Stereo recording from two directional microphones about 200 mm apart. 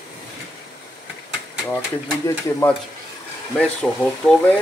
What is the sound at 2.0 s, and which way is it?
Speech, 15° left (ahead or behind).